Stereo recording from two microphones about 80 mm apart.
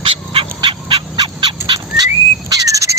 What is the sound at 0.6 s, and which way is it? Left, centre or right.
Fowl, right.